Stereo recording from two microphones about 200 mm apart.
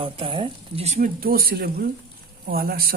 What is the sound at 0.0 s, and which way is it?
Speech, 25° right (ahead or behind).